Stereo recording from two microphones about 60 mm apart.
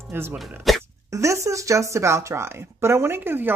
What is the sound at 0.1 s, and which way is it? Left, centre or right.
Speech, right.